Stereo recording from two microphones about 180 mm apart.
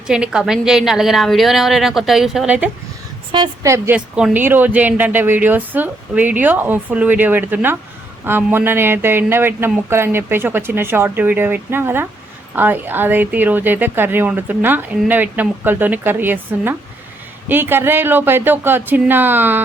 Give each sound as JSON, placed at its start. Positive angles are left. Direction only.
{"t": 0.1, "sound": "a woman's voice", "side_deg": -5}
{"t": 3.3, "sound": "speech", "side_deg": -20}
{"t": 3.9, "sound": "speech", "side_deg": -5}